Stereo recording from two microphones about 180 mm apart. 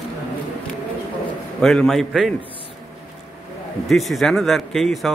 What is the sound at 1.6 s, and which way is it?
Speech, centre (ahead or behind).